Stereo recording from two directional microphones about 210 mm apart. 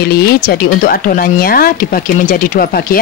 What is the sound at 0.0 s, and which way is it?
Speech, 50° left (ahead or behind).